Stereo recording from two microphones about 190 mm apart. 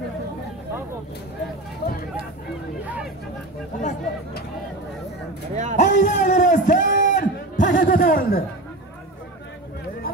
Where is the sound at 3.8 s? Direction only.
40° left (ahead or behind).